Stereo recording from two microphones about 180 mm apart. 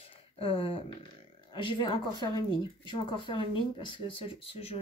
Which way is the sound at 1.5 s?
25° left (ahead or behind).